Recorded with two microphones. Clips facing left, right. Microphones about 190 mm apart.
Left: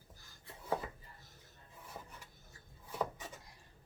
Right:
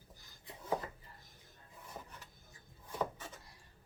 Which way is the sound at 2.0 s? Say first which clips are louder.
Right 1 dB; centre (ahead or behind).